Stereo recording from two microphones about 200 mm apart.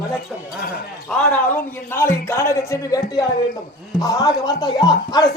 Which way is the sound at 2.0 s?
10° left (ahead or behind).